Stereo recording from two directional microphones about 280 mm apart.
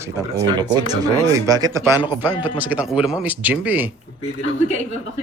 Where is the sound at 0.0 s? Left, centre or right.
Centre.